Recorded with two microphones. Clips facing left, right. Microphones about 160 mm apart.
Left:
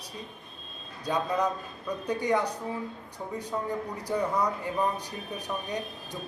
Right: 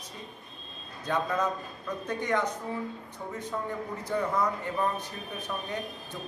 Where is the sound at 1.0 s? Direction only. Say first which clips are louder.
Left 1 dB; 15° left (ahead or behind).